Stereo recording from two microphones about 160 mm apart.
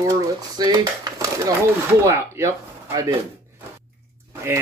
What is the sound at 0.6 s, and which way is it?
Dishes, 25° right (ahead or behind).